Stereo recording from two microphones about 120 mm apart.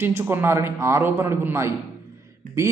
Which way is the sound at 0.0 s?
20° right (ahead or behind).